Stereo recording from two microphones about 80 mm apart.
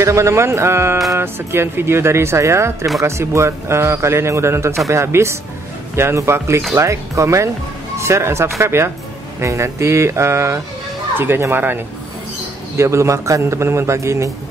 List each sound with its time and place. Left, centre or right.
0.0 s speech: right
12.7 s speech: right